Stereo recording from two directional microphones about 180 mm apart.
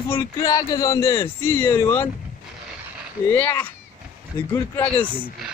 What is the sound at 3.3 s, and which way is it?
Speech, 10° left (ahead or behind).